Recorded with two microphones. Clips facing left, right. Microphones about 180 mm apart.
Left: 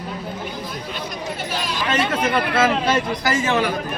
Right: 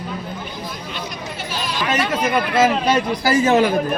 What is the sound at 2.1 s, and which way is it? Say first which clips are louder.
Speech: right 1 dB; 10° right (ahead or behind).